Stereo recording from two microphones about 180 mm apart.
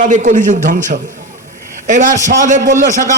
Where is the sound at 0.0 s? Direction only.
45° right (ahead or behind).